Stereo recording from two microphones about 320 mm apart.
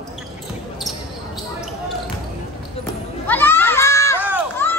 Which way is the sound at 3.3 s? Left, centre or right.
Centre.